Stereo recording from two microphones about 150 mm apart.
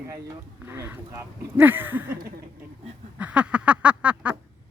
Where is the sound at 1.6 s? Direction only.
15° right (ahead or behind).